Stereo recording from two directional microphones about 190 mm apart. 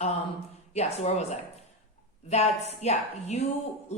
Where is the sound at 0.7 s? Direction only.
35° left (ahead or behind).